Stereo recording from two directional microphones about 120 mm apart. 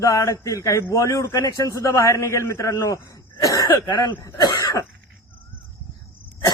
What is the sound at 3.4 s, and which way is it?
Cough, 30° left (ahead or behind).